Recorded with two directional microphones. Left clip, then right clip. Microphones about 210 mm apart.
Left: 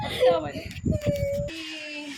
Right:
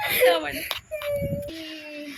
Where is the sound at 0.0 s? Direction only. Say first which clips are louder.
Right 3 dB; 15° right (ahead or behind).